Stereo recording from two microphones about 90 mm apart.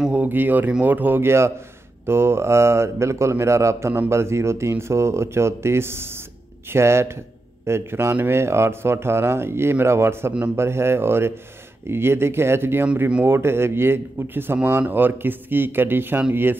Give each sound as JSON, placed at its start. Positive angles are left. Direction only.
{"t": 0.0, "sound": "speech", "side_deg": -15}